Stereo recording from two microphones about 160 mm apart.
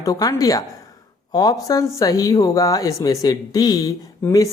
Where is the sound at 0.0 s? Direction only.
20° left (ahead or behind).